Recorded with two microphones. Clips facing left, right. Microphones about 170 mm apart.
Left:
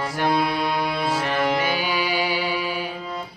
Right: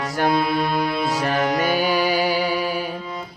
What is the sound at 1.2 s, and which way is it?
Music, 40° right (ahead or behind).